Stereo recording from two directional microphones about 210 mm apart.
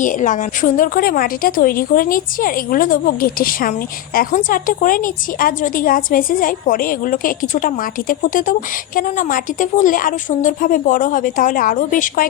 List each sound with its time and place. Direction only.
0.0 s a woman's voice: 40° left (ahead or behind)